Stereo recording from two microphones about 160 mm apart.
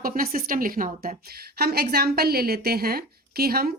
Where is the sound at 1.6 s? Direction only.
85° right.